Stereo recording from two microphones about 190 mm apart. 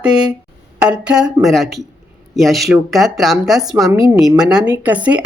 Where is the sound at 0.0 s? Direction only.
5° right (ahead or behind).